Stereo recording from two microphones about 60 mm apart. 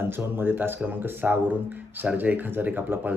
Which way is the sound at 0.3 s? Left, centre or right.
Right.